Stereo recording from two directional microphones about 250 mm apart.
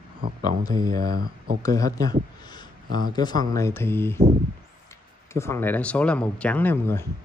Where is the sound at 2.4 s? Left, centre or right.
Centre.